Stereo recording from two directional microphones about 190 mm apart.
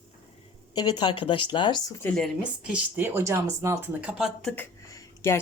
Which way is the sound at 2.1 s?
Centre (ahead or behind).